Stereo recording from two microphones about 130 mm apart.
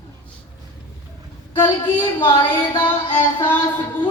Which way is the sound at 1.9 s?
40° left (ahead or behind).